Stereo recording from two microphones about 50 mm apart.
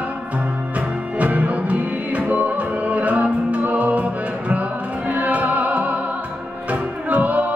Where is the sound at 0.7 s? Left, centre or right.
Right.